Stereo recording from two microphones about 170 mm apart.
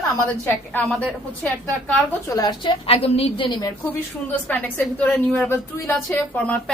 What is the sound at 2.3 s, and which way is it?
A woman's voice, 25° left (ahead or behind).